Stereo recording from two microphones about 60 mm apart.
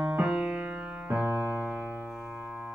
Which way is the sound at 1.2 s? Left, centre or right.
Right.